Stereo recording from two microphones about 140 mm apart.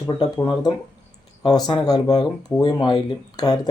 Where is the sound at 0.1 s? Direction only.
30° left (ahead or behind).